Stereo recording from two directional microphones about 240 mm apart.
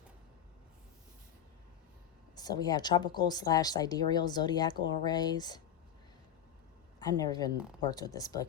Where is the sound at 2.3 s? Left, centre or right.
Centre.